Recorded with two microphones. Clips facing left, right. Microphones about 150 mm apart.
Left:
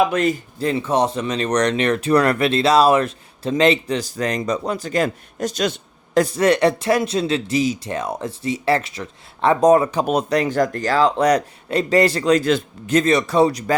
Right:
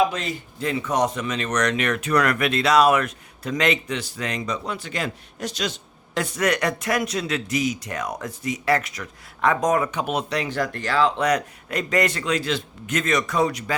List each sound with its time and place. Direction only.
0.1 s speech: 55° left (ahead or behind)
0.6 s speech: 30° left (ahead or behind); by 5.8 s 50° left (ahead or behind)
6.1 s speech: 35° left (ahead or behind)
12.9 s speech: 30° left (ahead or behind)